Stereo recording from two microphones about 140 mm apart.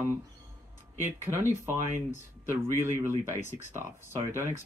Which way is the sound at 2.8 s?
20° right (ahead or behind).